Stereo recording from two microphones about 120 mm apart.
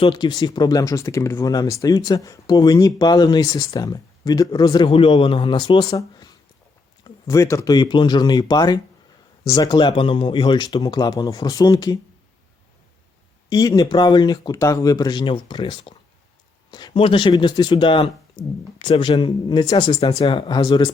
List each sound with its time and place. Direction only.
0.0 s speech: 40° left (ahead or behind)
4.9 s speech: 50° left (ahead or behind)
5.9 s speech: 35° left (ahead or behind)
13.5 s speech: 30° left (ahead or behind)